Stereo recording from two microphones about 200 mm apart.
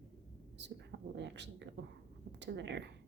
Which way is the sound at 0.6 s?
60° right (ahead or behind).